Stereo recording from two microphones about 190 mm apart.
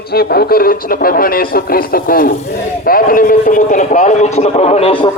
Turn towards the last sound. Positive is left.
turn(degrees=30)  # may be behind; listen again after turning